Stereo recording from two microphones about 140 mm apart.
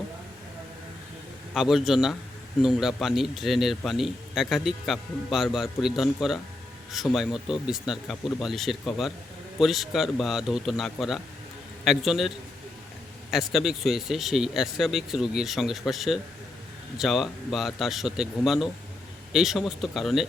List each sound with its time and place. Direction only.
1.5 s a man's voice: centre (ahead or behind)
13.3 s a man's voice: centre (ahead or behind)